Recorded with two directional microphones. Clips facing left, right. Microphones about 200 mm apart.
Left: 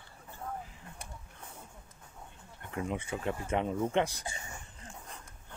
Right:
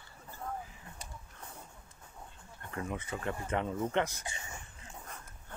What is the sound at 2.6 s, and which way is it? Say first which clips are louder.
Speech: left 3 dB; 20° left (ahead or behind).